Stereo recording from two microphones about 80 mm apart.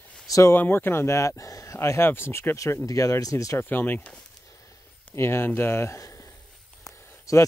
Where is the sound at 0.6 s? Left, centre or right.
Left.